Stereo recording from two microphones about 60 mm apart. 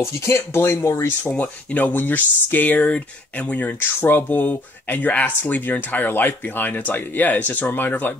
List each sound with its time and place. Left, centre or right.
0.0 s speech: left
1.3 s speech: left